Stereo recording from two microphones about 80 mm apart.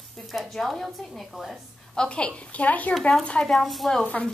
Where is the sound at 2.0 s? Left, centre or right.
Centre.